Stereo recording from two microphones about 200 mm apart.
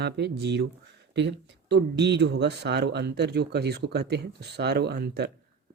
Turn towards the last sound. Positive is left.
turn(degrees=-55)  # may be behind; listen again after turning